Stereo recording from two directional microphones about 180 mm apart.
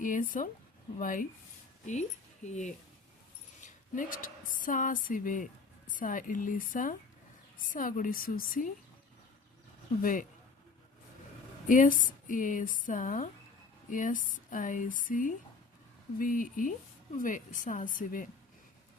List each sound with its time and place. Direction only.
0.0 s a woman's voice: 45° left (ahead or behind)
10.0 s speech: 50° left (ahead or behind)
11.7 s speech: 50° left (ahead or behind)